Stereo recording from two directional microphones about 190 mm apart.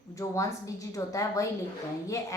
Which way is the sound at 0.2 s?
15° left (ahead or behind).